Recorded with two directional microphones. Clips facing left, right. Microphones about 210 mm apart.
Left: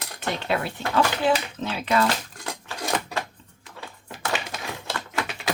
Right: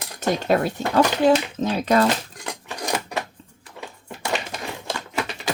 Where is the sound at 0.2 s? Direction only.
45° right (ahead or behind).